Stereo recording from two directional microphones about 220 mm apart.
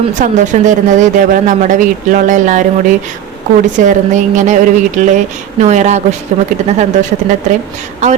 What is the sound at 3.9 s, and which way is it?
Speech, 35° right (ahead or behind).